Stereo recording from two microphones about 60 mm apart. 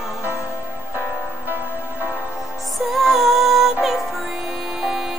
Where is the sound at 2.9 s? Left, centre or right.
Centre.